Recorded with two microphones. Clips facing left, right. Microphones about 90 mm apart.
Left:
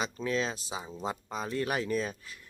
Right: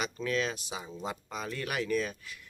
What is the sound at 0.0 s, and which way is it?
Speech, 25° left (ahead or behind).